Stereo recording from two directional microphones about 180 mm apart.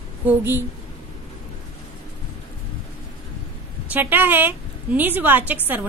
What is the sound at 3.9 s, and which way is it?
A woman's voice, 10° right (ahead or behind).